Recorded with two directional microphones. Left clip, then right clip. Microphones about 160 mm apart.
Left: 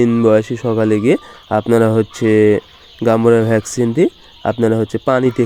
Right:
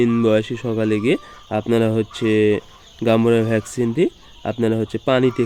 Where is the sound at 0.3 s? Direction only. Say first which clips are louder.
Left 6 dB; 15° left (ahead or behind).